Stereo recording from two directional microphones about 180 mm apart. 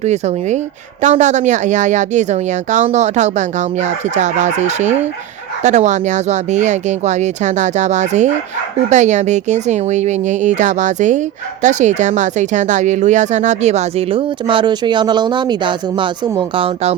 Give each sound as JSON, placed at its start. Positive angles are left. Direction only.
{"t": 0.0, "sound": "speech", "side_deg": -40}